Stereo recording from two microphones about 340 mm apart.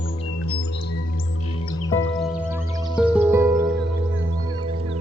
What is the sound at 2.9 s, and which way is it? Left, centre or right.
Music, centre.